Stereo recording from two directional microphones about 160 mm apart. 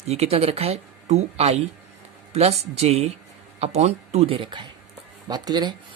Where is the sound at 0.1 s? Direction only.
40° right (ahead or behind).